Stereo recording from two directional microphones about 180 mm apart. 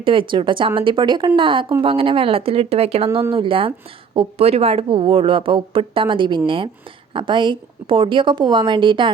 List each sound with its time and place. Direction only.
0.0 s speech: 30° right (ahead or behind)